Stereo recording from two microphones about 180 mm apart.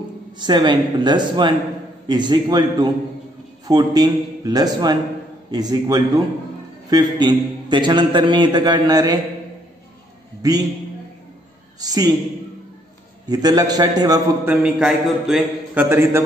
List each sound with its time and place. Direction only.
0.4 s a man's voice: 25° right (ahead or behind)
10.4 s a man's voice: 20° right (ahead or behind)
11.8 s a man's voice: 20° right (ahead or behind)
13.3 s a man's voice: 20° right (ahead or behind)
14.4 s a man's voice: 10° right (ahead or behind)